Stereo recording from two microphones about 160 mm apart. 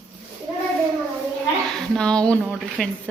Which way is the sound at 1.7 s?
5° left (ahead or behind).